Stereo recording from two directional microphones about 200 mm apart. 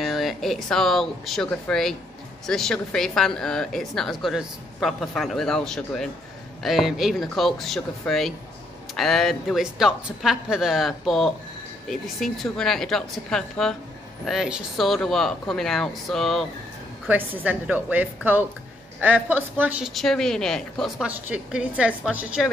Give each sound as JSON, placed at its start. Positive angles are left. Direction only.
{"t": 0.0, "sound": "a woman's voice", "side_deg": 0}